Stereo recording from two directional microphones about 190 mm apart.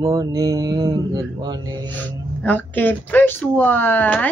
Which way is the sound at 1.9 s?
10° left (ahead or behind).